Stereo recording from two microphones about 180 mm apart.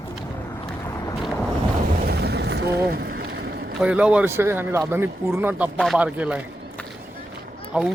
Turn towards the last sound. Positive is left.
turn(degrees=-5)  # may be behind; listen again after turning